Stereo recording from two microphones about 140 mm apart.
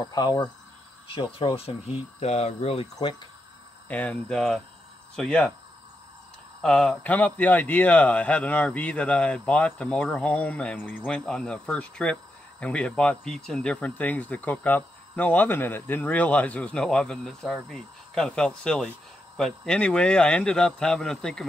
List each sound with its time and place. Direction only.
0.1 s speech: 30° left (ahead or behind)
1.0 s speech: 40° left (ahead or behind)
3.9 s speech: 10° left (ahead or behind)
6.6 s speech: 5° left (ahead or behind)